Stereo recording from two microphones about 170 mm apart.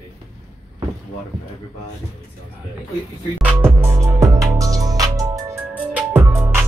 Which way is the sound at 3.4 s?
10° right (ahead or behind).